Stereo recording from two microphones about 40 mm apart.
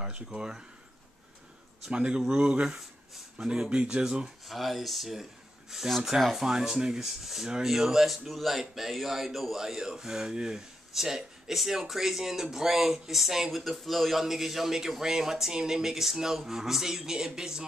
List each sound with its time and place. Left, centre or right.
0.0 s speech: centre
1.9 s speech: right
4.5 s speech: centre